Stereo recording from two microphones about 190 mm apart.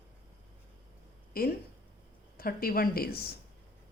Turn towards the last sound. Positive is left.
turn(degrees=55)  # may be behind; listen again after turning